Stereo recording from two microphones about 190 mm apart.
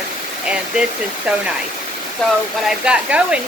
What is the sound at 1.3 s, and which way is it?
Speech, 5° right (ahead or behind).